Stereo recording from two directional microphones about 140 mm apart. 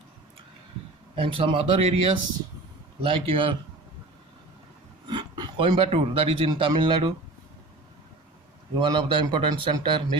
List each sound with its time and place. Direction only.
1.1 s a man's voice: 40° right (ahead or behind)
5.0 s speech: 35° right (ahead or behind)
8.8 s a man's voice: 35° right (ahead or behind)